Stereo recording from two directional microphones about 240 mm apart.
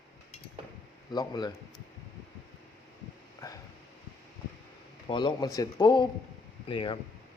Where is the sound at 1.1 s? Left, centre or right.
Centre.